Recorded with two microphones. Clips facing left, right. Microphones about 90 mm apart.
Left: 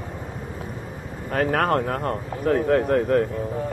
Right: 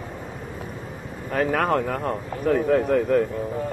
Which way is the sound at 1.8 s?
35° left (ahead or behind).